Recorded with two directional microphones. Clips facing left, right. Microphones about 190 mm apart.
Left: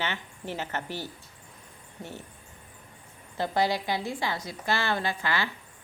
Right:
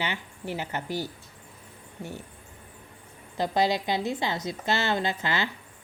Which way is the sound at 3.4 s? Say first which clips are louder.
Right 2 dB; 20° right (ahead or behind).